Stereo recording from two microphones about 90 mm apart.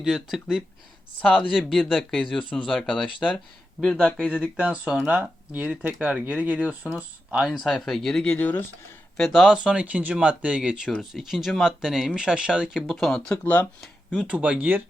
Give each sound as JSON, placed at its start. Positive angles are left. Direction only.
{"t": 0.0, "sound": "speech", "side_deg": 0}
{"t": 4.2, "sound": "speech", "side_deg": -10}
{"t": 7.6, "sound": "speech", "side_deg": 0}
{"t": 9.1, "sound": "speech", "side_deg": 5}
{"t": 9.5, "sound": "speech", "side_deg": -10}
{"t": 13.4, "sound": "speech", "side_deg": 20}
{"t": 14.2, "sound": "speech", "side_deg": -15}